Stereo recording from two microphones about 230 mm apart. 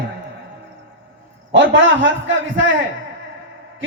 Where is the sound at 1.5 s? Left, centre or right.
Right.